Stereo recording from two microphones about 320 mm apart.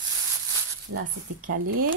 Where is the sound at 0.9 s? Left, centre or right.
Right.